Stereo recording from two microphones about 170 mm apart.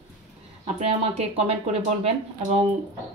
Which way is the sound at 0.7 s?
35° right (ahead or behind).